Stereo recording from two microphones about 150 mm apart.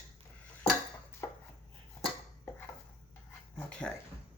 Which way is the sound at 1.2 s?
20° left (ahead or behind).